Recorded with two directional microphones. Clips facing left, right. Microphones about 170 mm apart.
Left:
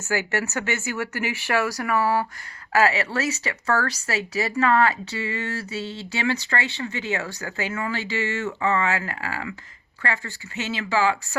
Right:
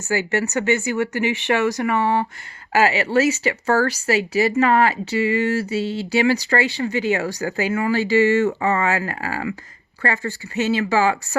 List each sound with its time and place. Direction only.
0.5 s speech: 15° right (ahead or behind); by 11.3 s 40° right (ahead or behind)